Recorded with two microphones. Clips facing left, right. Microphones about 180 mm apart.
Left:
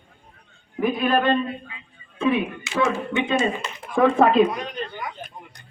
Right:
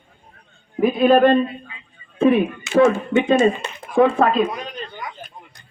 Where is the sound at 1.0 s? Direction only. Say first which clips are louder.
Right 8 dB; 40° right (ahead or behind).